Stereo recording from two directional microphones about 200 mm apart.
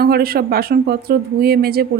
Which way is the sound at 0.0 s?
50° right (ahead or behind).